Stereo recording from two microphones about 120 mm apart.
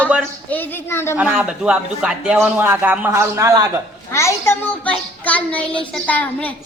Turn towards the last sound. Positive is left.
turn(degrees=15)  # may be behind; listen again after turning